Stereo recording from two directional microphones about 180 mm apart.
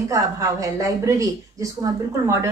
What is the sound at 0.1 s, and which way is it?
A woman's voice, 20° right (ahead or behind).